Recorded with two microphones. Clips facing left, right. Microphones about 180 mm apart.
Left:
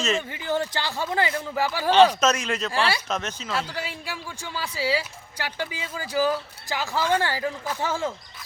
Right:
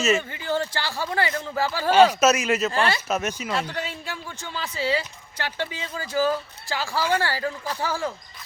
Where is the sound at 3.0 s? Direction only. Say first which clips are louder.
Right 4 dB; 5° right (ahead or behind).